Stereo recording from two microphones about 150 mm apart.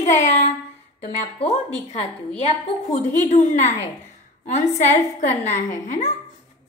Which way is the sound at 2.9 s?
50° left (ahead or behind).